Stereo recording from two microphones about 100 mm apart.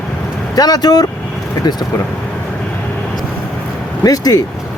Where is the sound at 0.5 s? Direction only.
40° left (ahead or behind).